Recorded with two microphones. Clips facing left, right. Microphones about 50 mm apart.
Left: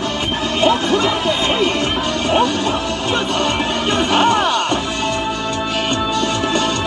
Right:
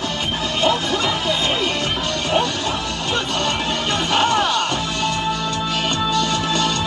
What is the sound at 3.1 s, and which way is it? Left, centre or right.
Music, centre.